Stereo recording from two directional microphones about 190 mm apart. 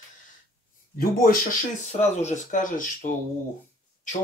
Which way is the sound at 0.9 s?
50° left (ahead or behind).